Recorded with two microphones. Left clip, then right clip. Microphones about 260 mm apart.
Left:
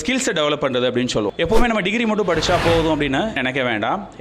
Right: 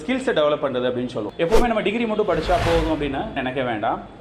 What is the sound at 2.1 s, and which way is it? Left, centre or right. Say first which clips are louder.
Speech: left 1 dB; left.